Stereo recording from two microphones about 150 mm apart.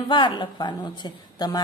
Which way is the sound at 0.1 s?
30° left (ahead or behind).